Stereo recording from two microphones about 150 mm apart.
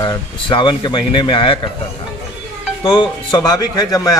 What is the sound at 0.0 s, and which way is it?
Speech, 30° left (ahead or behind).